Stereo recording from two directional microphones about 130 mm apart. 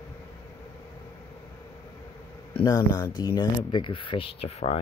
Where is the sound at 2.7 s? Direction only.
25° left (ahead or behind); by 4.8 s 50° left (ahead or behind).